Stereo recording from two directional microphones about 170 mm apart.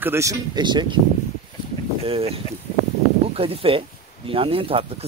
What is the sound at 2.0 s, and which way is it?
Speech, 35° right (ahead or behind).